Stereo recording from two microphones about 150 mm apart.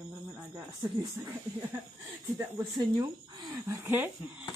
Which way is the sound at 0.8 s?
30° right (ahead or behind).